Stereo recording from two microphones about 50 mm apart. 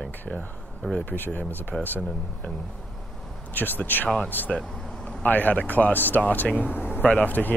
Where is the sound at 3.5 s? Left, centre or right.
Left.